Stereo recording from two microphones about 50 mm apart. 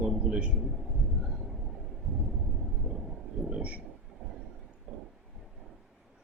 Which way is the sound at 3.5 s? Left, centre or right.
Right.